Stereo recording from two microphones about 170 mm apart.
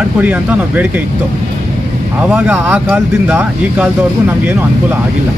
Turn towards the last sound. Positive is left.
turn(degrees=-15)  # may be behind; listen again after turning